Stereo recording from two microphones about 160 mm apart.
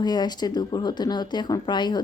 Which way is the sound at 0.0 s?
25° left (ahead or behind).